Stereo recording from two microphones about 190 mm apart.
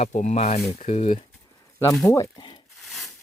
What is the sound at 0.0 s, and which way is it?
Speech, 35° left (ahead or behind).